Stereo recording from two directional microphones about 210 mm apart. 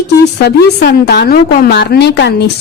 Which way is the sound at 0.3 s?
50° left (ahead or behind).